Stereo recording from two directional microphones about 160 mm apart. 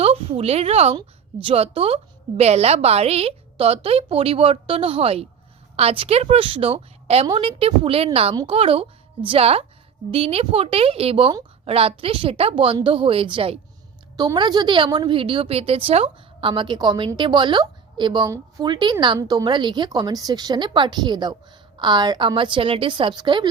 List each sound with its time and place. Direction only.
0.0 s a woman's voice: 35° right (ahead or behind)